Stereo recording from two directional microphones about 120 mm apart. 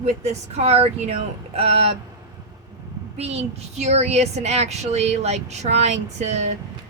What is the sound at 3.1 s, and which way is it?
Speech, 60° right (ahead or behind).